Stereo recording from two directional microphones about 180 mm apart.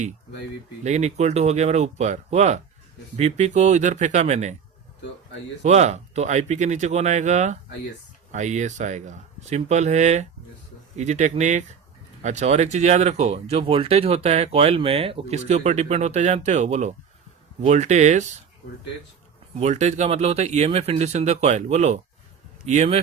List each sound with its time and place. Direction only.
0.9 s speech: 40° right (ahead or behind)
5.6 s speech: 40° right (ahead or behind)
19.5 s speech: 40° right (ahead or behind)